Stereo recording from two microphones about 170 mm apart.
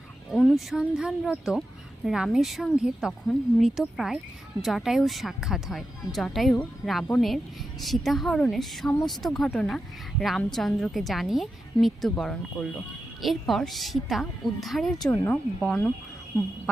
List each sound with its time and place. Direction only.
0.3 s a woman's voice: centre (ahead or behind)
15.1 s speech: 15° left (ahead or behind)
15.6 s a woman's voice: 5° left (ahead or behind)